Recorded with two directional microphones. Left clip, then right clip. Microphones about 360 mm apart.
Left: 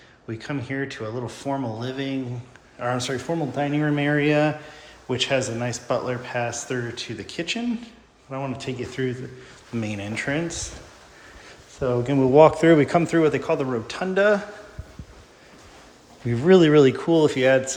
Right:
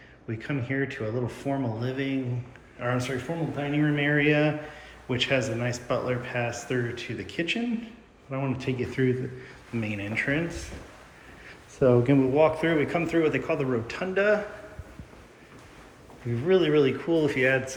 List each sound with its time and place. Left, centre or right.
0.3 s speech: centre
11.8 s speech: centre
12.3 s speech: centre
16.3 s speech: left